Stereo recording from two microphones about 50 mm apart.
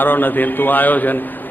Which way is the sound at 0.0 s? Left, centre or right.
Left.